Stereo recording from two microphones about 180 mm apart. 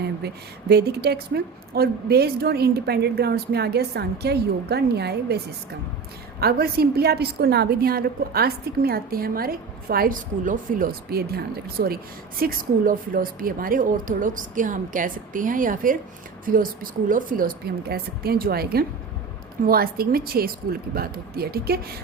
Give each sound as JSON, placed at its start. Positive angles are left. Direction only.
{"t": 0.7, "sound": "a woman's voice", "side_deg": -65}
{"t": 6.4, "sound": "a woman's voice", "side_deg": -60}